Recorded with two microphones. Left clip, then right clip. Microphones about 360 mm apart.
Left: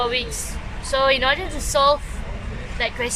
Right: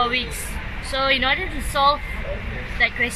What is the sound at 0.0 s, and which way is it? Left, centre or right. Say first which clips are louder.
Vehicle: right 1 dB; left.